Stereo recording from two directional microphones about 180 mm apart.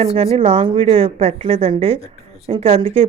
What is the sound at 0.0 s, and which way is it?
Speech, 35° right (ahead or behind).